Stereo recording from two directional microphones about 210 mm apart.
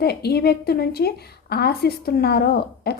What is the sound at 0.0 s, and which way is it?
A woman's voice, 50° left (ahead or behind).